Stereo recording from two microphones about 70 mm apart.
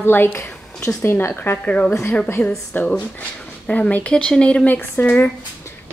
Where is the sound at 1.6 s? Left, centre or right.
Centre.